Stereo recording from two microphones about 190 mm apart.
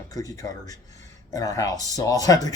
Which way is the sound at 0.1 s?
20° left (ahead or behind).